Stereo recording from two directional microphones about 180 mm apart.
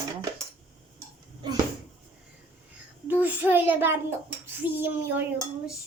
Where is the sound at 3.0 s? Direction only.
10° right (ahead or behind).